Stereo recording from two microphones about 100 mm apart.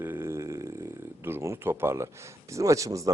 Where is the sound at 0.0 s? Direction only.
25° right (ahead or behind).